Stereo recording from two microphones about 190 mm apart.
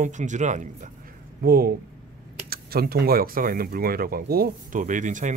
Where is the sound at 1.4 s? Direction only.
50° right (ahead or behind).